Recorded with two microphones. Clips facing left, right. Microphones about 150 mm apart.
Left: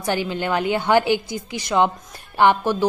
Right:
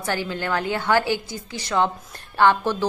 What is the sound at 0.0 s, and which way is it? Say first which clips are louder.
A woman's voice: left 3 dB; 15° left (ahead or behind).